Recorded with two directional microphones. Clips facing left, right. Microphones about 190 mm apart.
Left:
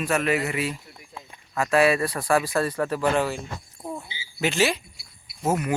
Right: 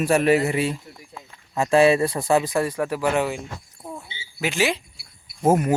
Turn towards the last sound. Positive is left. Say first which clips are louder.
# right 6 dB
turn(degrees=-50)  # may be behind; listen again after turning